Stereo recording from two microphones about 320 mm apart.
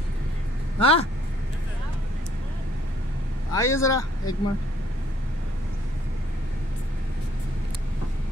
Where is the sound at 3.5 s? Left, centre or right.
Centre.